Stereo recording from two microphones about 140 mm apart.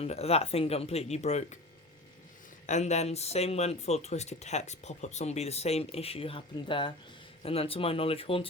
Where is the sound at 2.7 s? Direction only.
55° left (ahead or behind).